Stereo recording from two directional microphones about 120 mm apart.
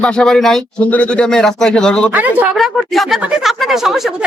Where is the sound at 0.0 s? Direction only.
5° left (ahead or behind).